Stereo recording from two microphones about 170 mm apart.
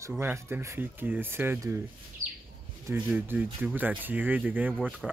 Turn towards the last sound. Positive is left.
turn(degrees=-10)  # may be behind; listen again after turning